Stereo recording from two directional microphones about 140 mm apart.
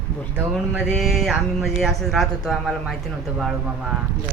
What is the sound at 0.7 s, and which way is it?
Speech, centre (ahead or behind).